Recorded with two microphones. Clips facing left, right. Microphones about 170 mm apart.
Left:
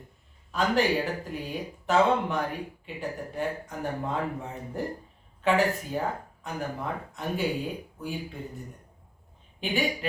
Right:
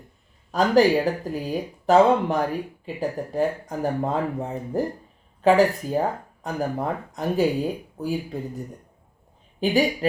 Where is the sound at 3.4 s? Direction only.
35° right (ahead or behind).